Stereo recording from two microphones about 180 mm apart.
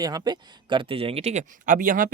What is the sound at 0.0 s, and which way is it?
Speech, 20° right (ahead or behind).